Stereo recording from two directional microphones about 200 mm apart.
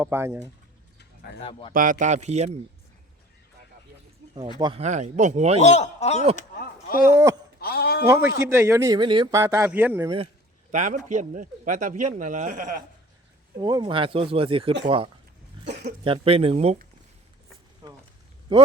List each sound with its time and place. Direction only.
0.0 s a man's voice: 10° right (ahead or behind)
1.5 s a man's voice: 25° left (ahead or behind)
1.7 s a man's voice: 40° right (ahead or behind)
4.6 s a man's voice: 30° right (ahead or behind)
5.5 s a man's voice: 35° left (ahead or behind)
6.3 s speech: 45° left (ahead or behind)
7.6 s a sound: 50° left (ahead or behind)
8.0 s a man's voice: 10° right (ahead or behind)
10.7 s a man's voice: 40° right (ahead or behind)
13.6 s speech: 20° right (ahead or behind)
15.6 s speech: 55° right (ahead or behind)
16.0 s speech: 30° right (ahead or behind)
17.8 s a sound: 20° right (ahead or behind)
18.5 s speech: 25° right (ahead or behind)